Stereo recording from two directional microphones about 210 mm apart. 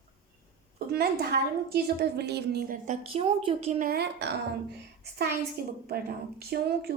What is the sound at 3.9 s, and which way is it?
Speech, 50° right (ahead or behind).